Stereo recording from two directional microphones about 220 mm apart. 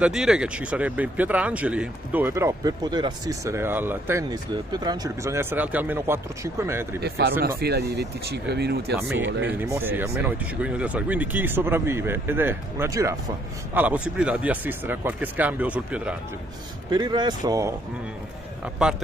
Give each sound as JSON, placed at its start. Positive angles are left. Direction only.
{"t": 0.0, "sound": "speech", "side_deg": -5}
{"t": 7.0, "sound": "speech", "side_deg": -45}
{"t": 9.6, "sound": "speech", "side_deg": -10}
{"t": 16.9, "sound": "speech", "side_deg": -20}